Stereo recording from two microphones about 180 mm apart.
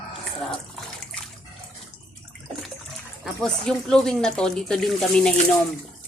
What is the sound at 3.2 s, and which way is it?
Speech, 5° left (ahead or behind).